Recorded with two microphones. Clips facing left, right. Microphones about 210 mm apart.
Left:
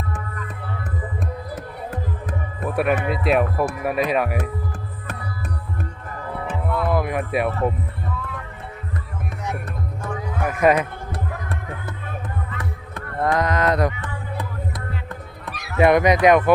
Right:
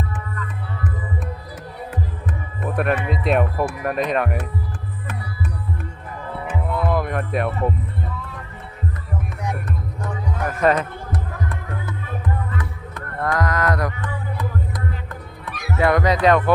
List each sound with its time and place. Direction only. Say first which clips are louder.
2.7 s speech: left 1 dB; 5° left (ahead or behind)
6.4 s music: even; 20° right (ahead or behind)
6.8 s music: left 1 dB; 5° left (ahead or behind)
10.4 s speech: left 1 dB; 10° left (ahead or behind)
12.5 s a sound: right 2 dB; 25° left (ahead or behind)
15.8 s speech: left 3 dB; 20° left (ahead or behind)